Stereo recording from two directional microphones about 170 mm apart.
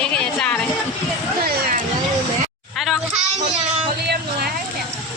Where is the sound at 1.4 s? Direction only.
60° right (ahead or behind).